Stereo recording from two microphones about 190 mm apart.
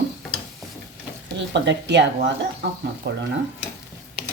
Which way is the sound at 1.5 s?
65° right (ahead or behind).